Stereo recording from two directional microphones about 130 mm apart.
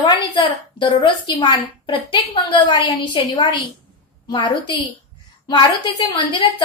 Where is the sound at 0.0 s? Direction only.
35° left (ahead or behind).